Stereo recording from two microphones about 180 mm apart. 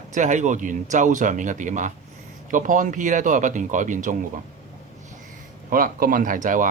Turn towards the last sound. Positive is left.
turn(degrees=-45)  # may be behind; listen again after turning